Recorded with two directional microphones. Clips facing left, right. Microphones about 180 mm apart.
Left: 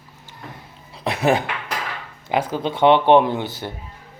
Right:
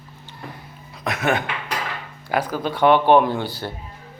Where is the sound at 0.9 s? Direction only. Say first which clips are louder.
Left 3 dB; 30° left (ahead or behind).